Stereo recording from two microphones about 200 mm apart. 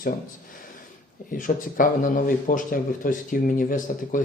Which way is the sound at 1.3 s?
40° left (ahead or behind).